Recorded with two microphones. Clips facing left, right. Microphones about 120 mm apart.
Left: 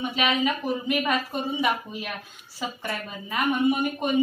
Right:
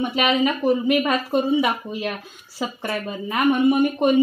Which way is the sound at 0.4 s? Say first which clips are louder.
Right 6 dB; 90° right.